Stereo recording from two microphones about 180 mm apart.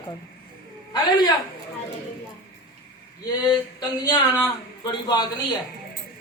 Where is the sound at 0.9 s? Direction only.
25° left (ahead or behind).